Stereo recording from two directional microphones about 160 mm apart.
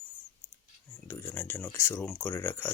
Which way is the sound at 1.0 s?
15° left (ahead or behind).